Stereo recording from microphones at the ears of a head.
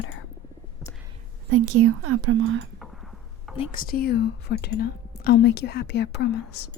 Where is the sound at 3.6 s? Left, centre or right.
Left.